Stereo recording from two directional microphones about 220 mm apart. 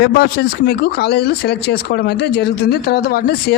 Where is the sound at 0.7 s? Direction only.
45° left (ahead or behind).